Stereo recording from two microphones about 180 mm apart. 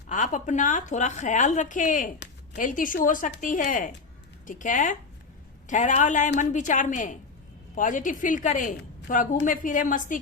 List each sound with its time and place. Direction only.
0.1 s a woman's voice: 45° left (ahead or behind)
2.1 s a sound: 75° left (ahead or behind)
2.6 s a woman's voice: 50° left (ahead or behind)